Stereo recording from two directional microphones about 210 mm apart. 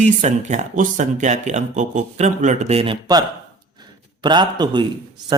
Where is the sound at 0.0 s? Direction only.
35° right (ahead or behind).